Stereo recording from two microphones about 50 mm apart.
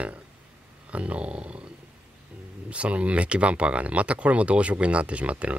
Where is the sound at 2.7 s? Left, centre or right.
Right.